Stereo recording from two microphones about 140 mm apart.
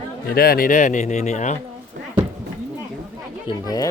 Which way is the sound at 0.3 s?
90° left.